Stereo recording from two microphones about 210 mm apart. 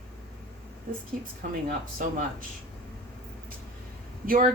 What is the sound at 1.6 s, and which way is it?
Speech, 40° right (ahead or behind).